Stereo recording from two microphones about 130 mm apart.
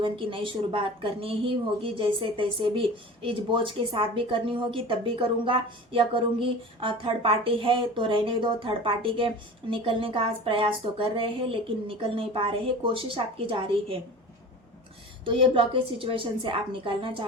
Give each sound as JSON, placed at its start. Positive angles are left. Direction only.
{"t": 0.0, "sound": "speech", "side_deg": -40}
{"t": 15.2, "sound": "speech", "side_deg": -45}